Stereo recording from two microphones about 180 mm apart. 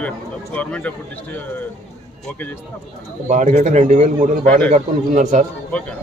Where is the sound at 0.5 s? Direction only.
10° left (ahead or behind).